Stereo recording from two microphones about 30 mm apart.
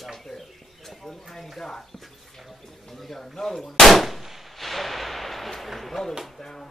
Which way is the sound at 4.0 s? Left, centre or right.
Centre.